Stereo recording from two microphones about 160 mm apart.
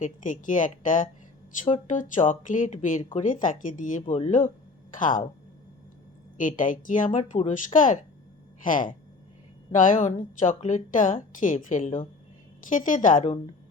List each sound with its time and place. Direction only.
0.0 s a woman's voice: 55° left (ahead or behind)
6.3 s a woman's voice: 55° left (ahead or behind)